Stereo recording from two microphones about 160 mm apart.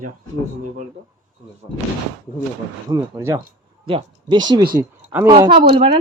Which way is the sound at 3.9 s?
30° right (ahead or behind).